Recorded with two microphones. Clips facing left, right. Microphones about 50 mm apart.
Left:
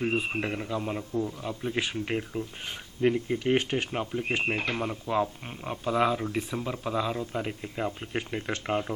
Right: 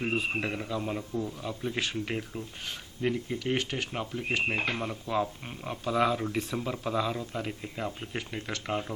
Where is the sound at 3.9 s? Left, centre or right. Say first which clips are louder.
Left 2 dB; centre.